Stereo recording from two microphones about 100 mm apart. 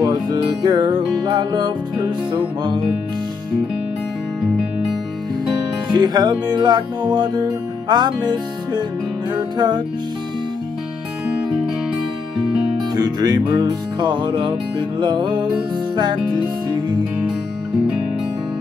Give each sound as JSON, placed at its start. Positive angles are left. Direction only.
{"t": 0.0, "sound": "music", "side_deg": -45}
{"t": 5.9, "sound": "music", "side_deg": -40}
{"t": 12.9, "sound": "music", "side_deg": -45}